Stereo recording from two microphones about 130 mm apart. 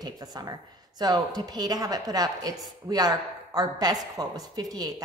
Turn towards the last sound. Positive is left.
turn(degrees=-30)  # may be behind; listen again after turning